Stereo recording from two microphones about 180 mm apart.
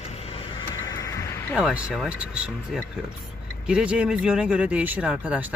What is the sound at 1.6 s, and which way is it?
Speech, 5° right (ahead or behind).